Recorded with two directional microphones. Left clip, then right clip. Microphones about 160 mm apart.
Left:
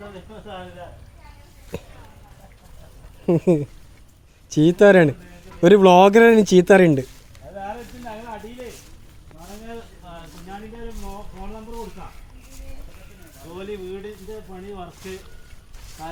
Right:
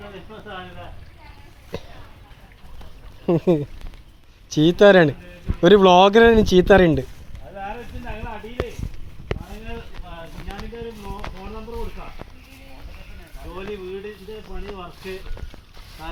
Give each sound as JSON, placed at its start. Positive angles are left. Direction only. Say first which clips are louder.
{"t": 3.2, "sound": "speech", "louder": "even", "side_deg": 30}